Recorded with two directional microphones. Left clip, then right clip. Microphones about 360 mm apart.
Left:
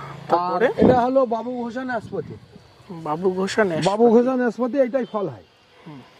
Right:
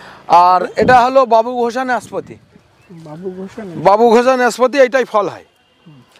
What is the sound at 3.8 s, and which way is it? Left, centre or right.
Speech, centre.